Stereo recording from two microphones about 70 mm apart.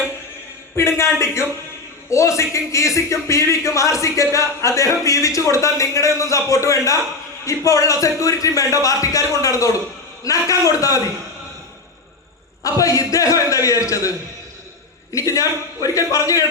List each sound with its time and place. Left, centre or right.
0.8 s a man's voice: left
12.6 s a man's voice: left
15.1 s a man's voice: left